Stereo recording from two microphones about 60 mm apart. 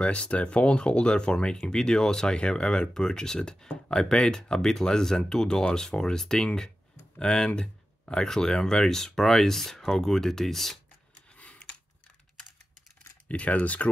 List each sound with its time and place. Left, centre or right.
0.0 s speech: centre
11.2 s computer keyboard: left
13.3 s speech: left